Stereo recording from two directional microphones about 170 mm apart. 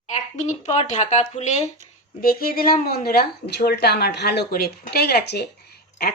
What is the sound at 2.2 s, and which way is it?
Speech, 60° left (ahead or behind).